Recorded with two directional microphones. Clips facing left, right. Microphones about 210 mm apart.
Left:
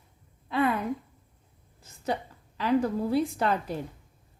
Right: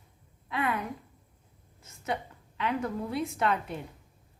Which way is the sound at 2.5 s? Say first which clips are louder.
Left 6 dB; 35° left (ahead or behind).